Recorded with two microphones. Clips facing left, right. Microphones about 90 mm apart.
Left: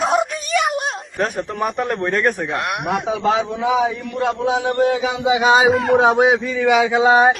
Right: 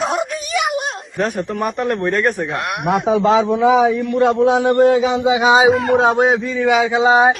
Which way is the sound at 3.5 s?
70° right (ahead or behind).